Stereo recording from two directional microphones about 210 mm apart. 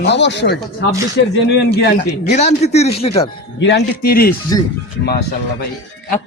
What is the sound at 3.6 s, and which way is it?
Speech, 55° left (ahead or behind).